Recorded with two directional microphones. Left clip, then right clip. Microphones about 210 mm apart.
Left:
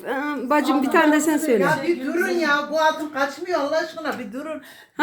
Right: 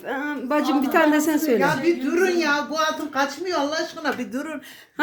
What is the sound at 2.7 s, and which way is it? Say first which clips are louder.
A woman's voice: left 2 dB; 55° right (ahead or behind).